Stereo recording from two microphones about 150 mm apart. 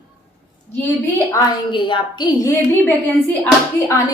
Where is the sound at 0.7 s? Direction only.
15° left (ahead or behind).